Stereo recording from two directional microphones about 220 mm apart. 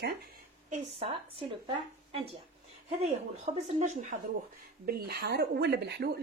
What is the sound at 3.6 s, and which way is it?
Speech, 30° right (ahead or behind).